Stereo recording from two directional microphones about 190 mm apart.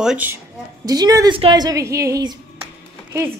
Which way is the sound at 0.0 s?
5° right (ahead or behind).